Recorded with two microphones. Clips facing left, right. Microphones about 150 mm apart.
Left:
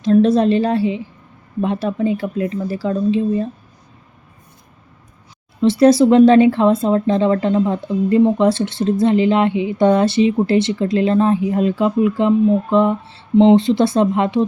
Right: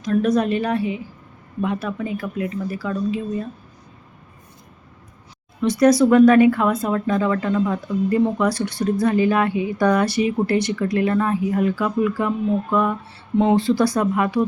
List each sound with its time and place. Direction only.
0.0 s speech: 25° left (ahead or behind)
5.5 s speech: 30° left (ahead or behind)